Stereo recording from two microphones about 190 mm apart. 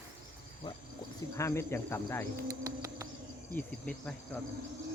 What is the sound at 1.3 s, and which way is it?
Speech, 15° left (ahead or behind).